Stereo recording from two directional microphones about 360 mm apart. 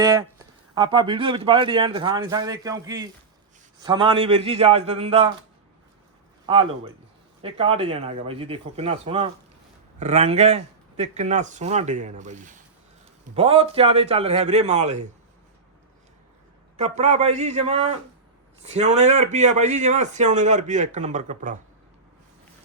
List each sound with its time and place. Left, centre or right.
0.0 s speech: centre
6.4 s a man's voice: centre
16.7 s a man's voice: centre